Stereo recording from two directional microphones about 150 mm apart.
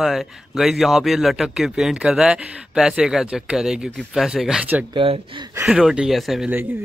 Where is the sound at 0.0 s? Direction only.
Centre (ahead or behind).